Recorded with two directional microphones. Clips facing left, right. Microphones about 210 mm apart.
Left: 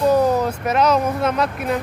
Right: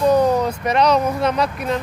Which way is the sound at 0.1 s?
5° left (ahead or behind).